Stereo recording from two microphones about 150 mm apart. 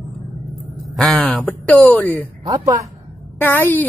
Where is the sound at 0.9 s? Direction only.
Centre (ahead or behind).